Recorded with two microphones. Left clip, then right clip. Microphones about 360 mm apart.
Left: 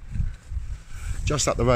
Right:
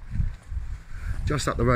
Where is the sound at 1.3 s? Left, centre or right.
Centre.